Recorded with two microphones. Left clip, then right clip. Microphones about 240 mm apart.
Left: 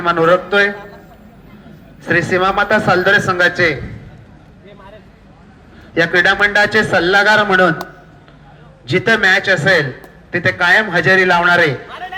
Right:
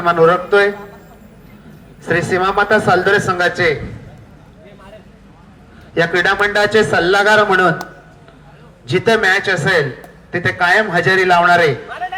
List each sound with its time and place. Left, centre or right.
0.0 s a man's voice: left
2.0 s a man's voice: left
5.9 s a man's voice: left
8.9 s a man's voice: left